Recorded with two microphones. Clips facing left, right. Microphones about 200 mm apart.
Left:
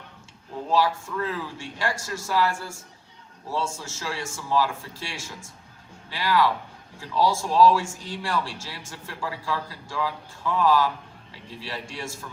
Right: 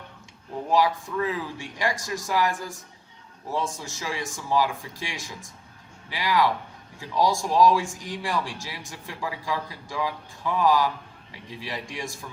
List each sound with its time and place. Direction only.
0.7 s speech: 15° right (ahead or behind)